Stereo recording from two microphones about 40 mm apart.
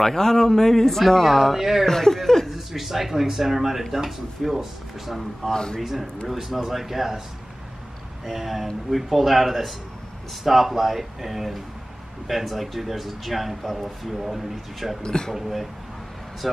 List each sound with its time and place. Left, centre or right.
0.0 s speech: centre
1.9 s speech: centre
5.5 s a man's voice: centre
5.8 s speech: centre
8.3 s speech: centre
15.0 s speech: centre
15.3 s speech: centre